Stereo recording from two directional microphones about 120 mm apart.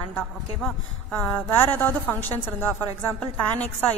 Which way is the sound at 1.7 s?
15° left (ahead or behind).